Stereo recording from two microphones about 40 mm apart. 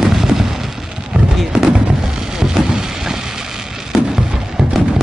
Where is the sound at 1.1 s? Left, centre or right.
Right.